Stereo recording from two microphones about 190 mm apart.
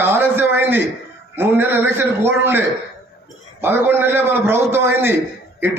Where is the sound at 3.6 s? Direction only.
10° right (ahead or behind).